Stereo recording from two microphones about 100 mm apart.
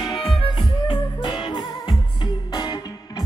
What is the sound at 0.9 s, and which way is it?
Music, 60° left (ahead or behind).